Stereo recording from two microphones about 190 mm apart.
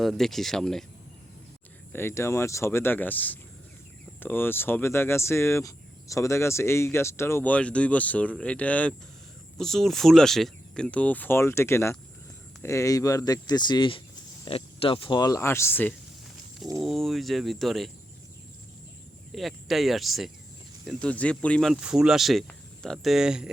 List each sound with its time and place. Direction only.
0.0 s speech: centre (ahead or behind)
1.9 s speech: 15° left (ahead or behind)
19.3 s speech: centre (ahead or behind)